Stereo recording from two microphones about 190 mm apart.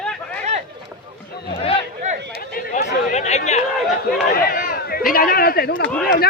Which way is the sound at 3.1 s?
35° left (ahead or behind).